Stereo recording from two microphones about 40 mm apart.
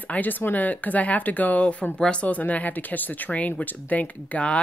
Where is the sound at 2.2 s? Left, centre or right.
Left.